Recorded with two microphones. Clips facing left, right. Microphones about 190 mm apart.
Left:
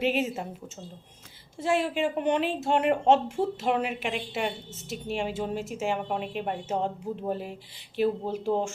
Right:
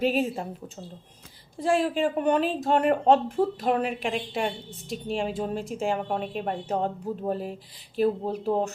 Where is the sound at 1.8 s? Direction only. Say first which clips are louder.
Right 2 dB; 35° right (ahead or behind).